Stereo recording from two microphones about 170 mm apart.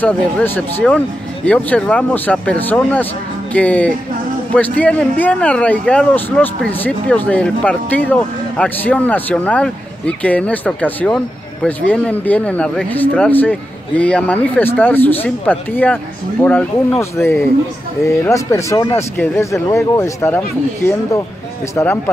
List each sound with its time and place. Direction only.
0.0 s speech: 10° left (ahead or behind)